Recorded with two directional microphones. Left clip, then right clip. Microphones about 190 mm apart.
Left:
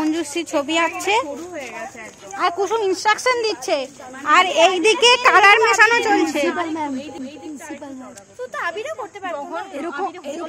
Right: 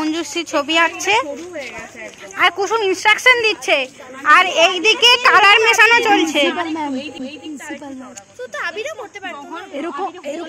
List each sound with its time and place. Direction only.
0.0 s speech: 10° left (ahead or behind)
2.3 s a woman's voice: centre (ahead or behind)
4.3 s speech: 10° left (ahead or behind)
4.6 s a child's voice: 25° left (ahead or behind)
5.3 s a woman's voice: 10° left (ahead or behind)
6.5 s a woman's voice: 40° right (ahead or behind)
8.5 s speech: 55° left (ahead or behind)
10.0 s speech: 10° right (ahead or behind)